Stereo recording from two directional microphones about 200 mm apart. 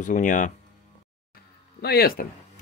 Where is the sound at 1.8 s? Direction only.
50° left (ahead or behind).